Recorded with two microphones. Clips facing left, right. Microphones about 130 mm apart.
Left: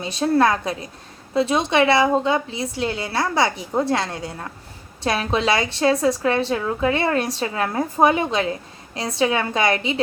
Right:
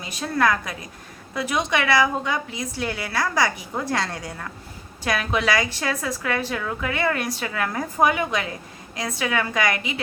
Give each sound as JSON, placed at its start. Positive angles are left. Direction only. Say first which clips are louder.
{"t": 0.0, "sound": "a woman's voice", "louder": "left 5 dB", "side_deg": 30}